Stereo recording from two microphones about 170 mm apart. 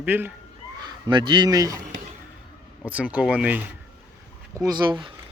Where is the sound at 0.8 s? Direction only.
25° right (ahead or behind).